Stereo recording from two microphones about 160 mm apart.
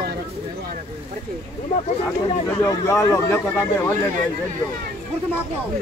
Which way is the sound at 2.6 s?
20° left (ahead or behind).